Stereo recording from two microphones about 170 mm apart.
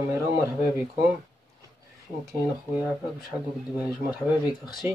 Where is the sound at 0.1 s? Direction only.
10° right (ahead or behind).